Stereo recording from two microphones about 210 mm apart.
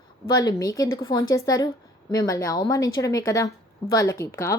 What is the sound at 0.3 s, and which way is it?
A woman's voice, 15° left (ahead or behind).